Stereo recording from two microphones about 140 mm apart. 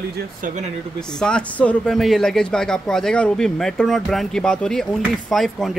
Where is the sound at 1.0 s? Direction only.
5° left (ahead or behind).